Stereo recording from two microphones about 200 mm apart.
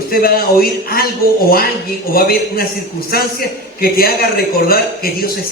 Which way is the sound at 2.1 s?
50° left (ahead or behind).